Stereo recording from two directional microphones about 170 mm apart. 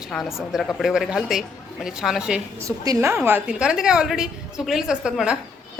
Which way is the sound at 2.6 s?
20° right (ahead or behind).